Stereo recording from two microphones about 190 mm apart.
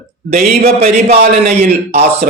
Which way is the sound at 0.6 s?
35° right (ahead or behind).